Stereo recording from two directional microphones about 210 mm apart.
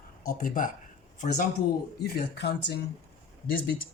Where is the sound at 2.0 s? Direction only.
50° left (ahead or behind).